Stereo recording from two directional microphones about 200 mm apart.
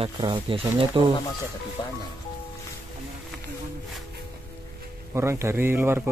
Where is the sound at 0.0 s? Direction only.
25° right (ahead or behind).